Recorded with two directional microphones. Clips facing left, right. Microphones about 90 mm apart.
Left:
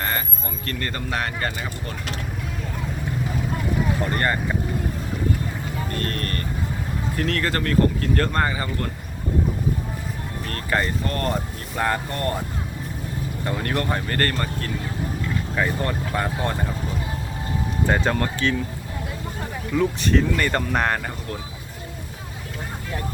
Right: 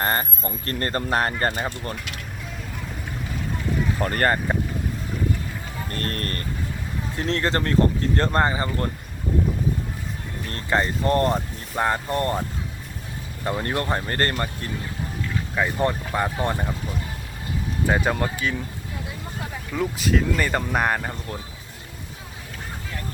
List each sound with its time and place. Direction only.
0.0 s speech: 40° right (ahead or behind)
4.0 s speech: 45° right (ahead or behind)
6.0 s speech: 35° right (ahead or behind)
10.5 s speech: 25° right (ahead or behind)
13.4 s speech: 20° right (ahead or behind)
17.8 s speech: 10° right (ahead or behind)
19.7 s speech: 5° right (ahead or behind)